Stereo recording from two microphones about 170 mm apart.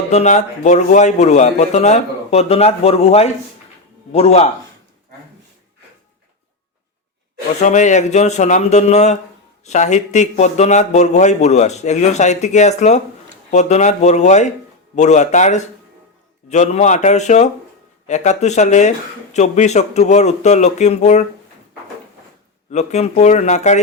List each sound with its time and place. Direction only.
0.1 s speech: 40° left (ahead or behind)
7.6 s speech: 45° left (ahead or behind)
22.7 s speech: 40° left (ahead or behind)